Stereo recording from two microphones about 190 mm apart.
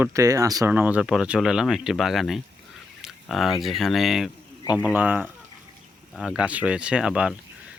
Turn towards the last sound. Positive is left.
turn(degrees=-5)  # may be behind; listen again after turning